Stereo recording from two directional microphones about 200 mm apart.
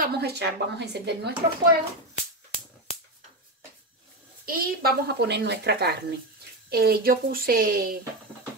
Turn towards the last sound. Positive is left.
turn(degrees=-45)  # may be behind; listen again after turning